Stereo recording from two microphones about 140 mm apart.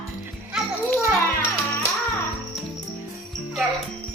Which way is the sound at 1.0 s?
15° right (ahead or behind).